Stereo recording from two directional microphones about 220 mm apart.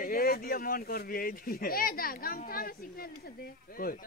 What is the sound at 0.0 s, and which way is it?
Speech, 45° left (ahead or behind).